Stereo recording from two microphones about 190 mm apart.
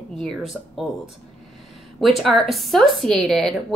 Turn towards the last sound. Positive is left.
turn(degrees=0)  # may be behind; listen again after turning